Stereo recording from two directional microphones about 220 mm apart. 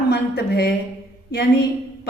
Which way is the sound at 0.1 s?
50° left (ahead or behind).